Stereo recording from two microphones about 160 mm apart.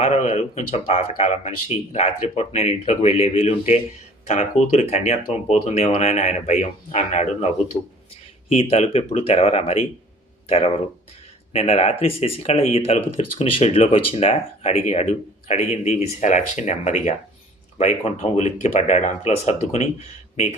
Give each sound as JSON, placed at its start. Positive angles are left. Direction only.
{"t": 0.0, "sound": "speech", "side_deg": 40}
{"t": 7.7, "sound": "speech", "side_deg": 25}
{"t": 8.4, "sound": "speech", "side_deg": 40}
{"t": 11.5, "sound": "speech", "side_deg": 40}